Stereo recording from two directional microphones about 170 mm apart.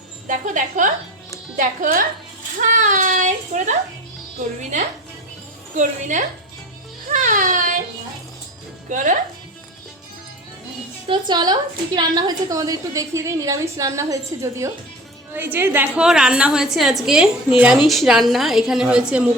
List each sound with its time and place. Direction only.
0.3 s speech: 50° right (ahead or behind)
5.7 s speech: 45° right (ahead or behind)
7.1 s music: 45° right (ahead or behind)
8.9 s speech: 50° right (ahead or behind)
11.1 s a woman's voice: 25° right (ahead or behind); by 19.3 s 5° right (ahead or behind)